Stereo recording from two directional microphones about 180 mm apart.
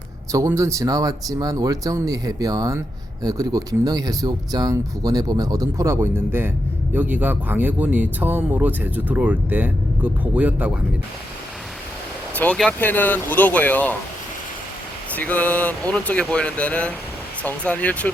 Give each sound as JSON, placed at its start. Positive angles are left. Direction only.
{"t": 0.3, "sound": "speech", "side_deg": -15}
{"t": 12.3, "sound": "speech", "side_deg": 10}
{"t": 15.1, "sound": "speech", "side_deg": 10}